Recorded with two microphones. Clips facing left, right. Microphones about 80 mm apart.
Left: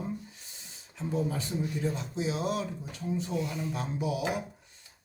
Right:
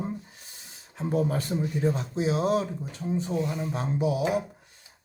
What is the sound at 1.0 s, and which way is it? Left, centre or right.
Speech, right.